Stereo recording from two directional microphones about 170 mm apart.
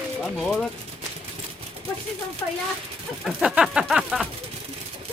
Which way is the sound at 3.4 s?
5° right (ahead or behind).